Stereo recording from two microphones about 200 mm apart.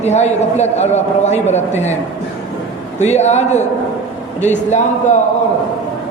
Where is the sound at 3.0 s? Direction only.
35° left (ahead or behind).